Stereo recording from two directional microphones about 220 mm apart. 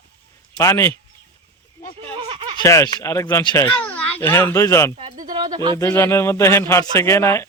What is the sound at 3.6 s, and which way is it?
A child's voice, 5° left (ahead or behind).